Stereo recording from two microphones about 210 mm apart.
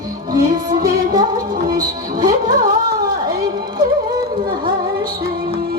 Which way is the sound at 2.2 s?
45° right (ahead or behind).